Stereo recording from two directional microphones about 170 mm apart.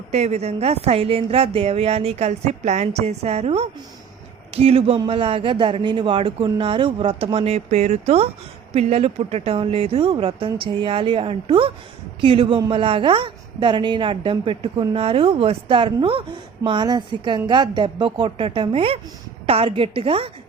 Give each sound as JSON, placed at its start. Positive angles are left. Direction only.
{"t": 0.1, "sound": "a woman's voice", "side_deg": -40}